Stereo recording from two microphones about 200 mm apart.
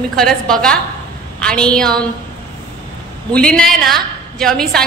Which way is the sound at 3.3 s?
5° left (ahead or behind).